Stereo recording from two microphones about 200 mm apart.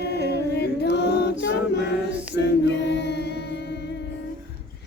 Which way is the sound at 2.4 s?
60° left (ahead or behind).